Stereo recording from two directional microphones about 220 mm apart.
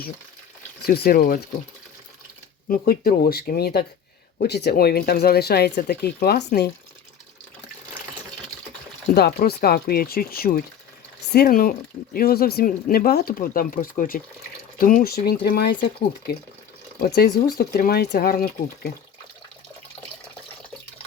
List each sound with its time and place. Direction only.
0.9 s speech: 45° left (ahead or behind)
2.6 s speech: 40° left (ahead or behind)
9.1 s speech: 45° left (ahead or behind)